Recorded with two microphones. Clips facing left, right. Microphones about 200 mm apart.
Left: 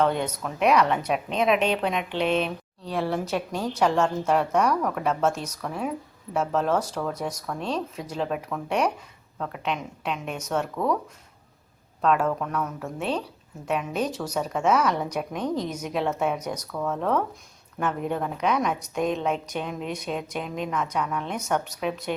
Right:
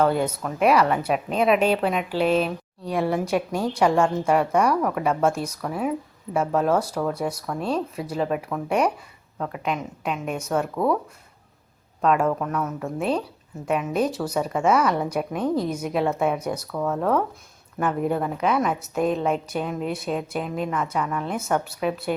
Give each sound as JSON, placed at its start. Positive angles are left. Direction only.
{"t": 0.0, "sound": "a woman's voice", "side_deg": -5}
{"t": 12.0, "sound": "a woman's voice", "side_deg": -10}